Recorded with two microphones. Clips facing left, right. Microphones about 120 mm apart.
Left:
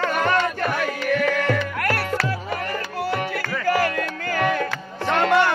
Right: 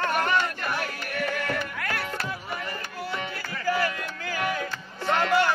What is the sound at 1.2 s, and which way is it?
Music, 85° left.